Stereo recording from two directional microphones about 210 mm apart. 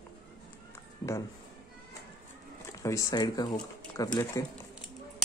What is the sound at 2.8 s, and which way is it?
Speech, 15° left (ahead or behind).